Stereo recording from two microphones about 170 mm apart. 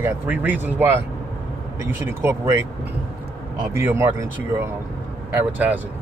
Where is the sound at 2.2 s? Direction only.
15° right (ahead or behind).